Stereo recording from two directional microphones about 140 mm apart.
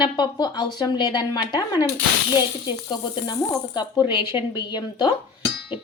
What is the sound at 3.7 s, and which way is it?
Speech, 35° left (ahead or behind).